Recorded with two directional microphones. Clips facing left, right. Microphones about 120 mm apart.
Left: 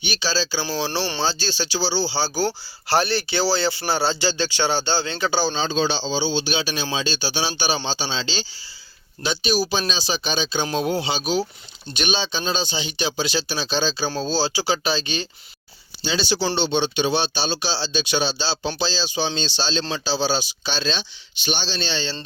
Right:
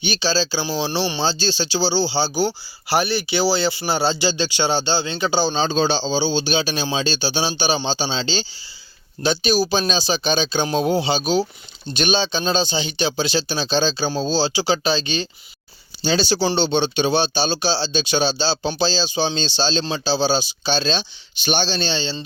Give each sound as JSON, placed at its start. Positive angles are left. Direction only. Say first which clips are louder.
{"t": 0.0, "sound": "speech", "louder": "right 4 dB", "side_deg": -30}
{"t": 5.6, "sound": "speech", "louder": "right 3 dB", "side_deg": -35}
{"t": 16.0, "sound": "speech", "louder": "right 4 dB", "side_deg": -40}
{"t": 21.4, "sound": "speech", "louder": "right 5 dB", "side_deg": -45}